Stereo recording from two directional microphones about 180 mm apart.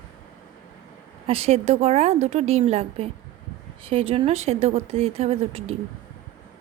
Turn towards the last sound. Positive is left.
turn(degrees=-35)  # may be behind; listen again after turning